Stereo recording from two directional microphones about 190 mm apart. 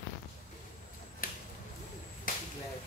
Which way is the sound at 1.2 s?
50° left (ahead or behind).